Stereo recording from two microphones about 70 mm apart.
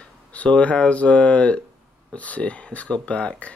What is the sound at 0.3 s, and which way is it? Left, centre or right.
Speech, centre.